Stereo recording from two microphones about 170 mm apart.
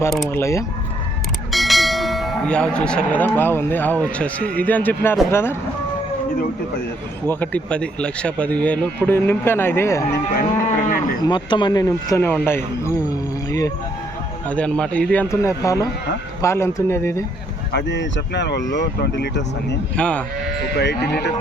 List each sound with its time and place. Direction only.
0.3 s speech: 15° left (ahead or behind)
1.5 s bell: centre (ahead or behind)
5.3 s speech: 15° left (ahead or behind)
7.3 s speech: 10° left (ahead or behind)
10.3 s moo: 45° left (ahead or behind)
11.2 s speech: 25° left (ahead or behind)
14.5 s speech: 5° left (ahead or behind)
17.7 s speech: 90° left
20.0 s speech: 5° left (ahead or behind)
20.7 s speech: 75° left (ahead or behind)